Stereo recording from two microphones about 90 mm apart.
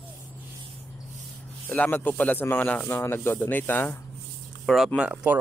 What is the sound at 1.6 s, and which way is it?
Speech, 20° left (ahead or behind).